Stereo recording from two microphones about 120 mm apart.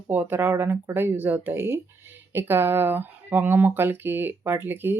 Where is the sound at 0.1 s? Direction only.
15° right (ahead or behind).